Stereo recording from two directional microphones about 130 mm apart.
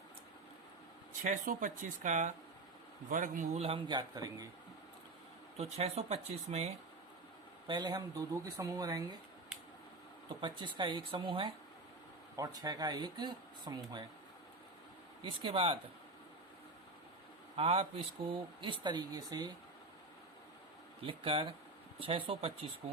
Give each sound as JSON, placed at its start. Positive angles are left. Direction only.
{"t": 1.2, "sound": "a man's voice", "side_deg": -85}
{"t": 3.6, "sound": "speech", "side_deg": -40}
{"t": 5.5, "sound": "speech", "side_deg": -55}
{"t": 7.7, "sound": "speech", "side_deg": -30}
{"t": 10.2, "sound": "speech", "side_deg": -35}
{"t": 12.4, "sound": "speech", "side_deg": -30}
{"t": 15.2, "sound": "speech", "side_deg": -40}
{"t": 17.6, "sound": "speech", "side_deg": -50}
{"t": 21.0, "sound": "speech", "side_deg": -45}